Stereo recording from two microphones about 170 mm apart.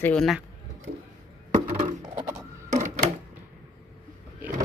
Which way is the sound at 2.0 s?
25° right (ahead or behind).